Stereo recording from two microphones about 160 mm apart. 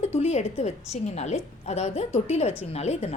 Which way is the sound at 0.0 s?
40° left (ahead or behind).